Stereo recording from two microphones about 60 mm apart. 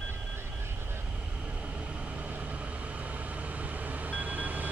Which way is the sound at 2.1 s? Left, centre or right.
Right.